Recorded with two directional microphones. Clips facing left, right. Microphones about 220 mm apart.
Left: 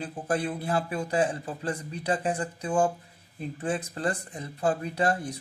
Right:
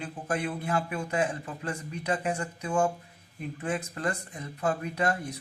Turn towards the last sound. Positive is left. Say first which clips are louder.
# left 2 dB
turn(degrees=30)  # may be behind; listen again after turning